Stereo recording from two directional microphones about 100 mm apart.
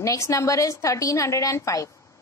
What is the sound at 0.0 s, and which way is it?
A woman's voice, 35° left (ahead or behind).